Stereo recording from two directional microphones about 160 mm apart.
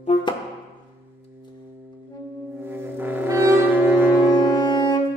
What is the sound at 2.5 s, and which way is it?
Music, 15° right (ahead or behind).